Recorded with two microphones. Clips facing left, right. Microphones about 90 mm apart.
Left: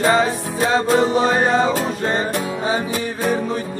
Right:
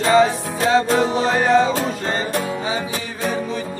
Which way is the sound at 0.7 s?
35° left (ahead or behind).